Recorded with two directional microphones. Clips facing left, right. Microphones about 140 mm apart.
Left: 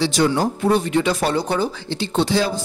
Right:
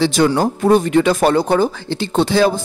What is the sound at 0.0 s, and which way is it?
Speech, 55° right (ahead or behind).